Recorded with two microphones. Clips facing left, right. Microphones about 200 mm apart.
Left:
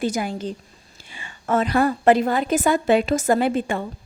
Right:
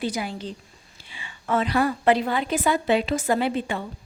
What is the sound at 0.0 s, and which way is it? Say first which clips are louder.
A woman's voice: left 4 dB; 45° left (ahead or behind).